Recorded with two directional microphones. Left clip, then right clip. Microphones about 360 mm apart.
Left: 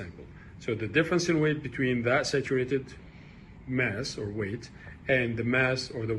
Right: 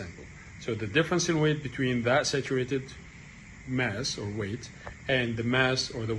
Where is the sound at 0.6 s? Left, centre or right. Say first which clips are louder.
Even; centre.